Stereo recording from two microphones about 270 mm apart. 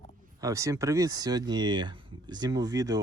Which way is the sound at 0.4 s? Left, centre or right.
Centre.